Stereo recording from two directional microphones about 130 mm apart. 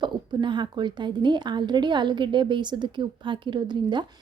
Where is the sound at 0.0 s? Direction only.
35° right (ahead or behind).